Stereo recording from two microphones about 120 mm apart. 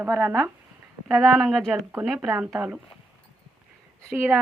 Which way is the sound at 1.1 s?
Centre (ahead or behind).